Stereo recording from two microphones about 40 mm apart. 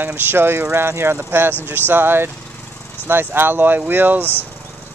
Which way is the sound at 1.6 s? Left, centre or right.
Right.